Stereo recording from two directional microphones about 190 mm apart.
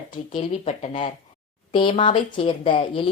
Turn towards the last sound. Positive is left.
turn(degrees=25)  # may be behind; listen again after turning